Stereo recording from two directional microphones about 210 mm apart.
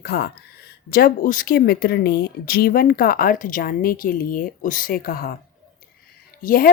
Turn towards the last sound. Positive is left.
turn(degrees=45)  # may be behind; listen again after turning